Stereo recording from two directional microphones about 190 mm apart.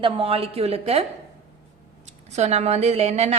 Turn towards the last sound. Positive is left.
turn(degrees=-35)  # may be behind; listen again after turning